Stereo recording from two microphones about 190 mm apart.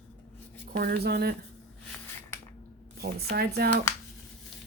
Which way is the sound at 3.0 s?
55° right (ahead or behind).